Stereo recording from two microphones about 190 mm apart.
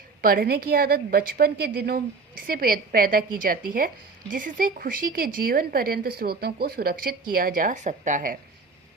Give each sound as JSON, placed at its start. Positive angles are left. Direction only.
{"t": 0.2, "sound": "speech", "side_deg": -50}